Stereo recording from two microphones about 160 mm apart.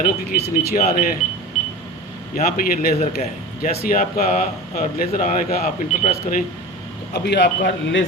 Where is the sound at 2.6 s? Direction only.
55° left (ahead or behind).